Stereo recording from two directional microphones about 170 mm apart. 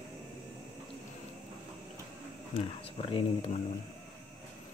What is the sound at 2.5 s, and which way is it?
Speech, 35° left (ahead or behind).